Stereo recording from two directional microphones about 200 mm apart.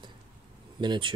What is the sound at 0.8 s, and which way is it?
Speech, 25° right (ahead or behind).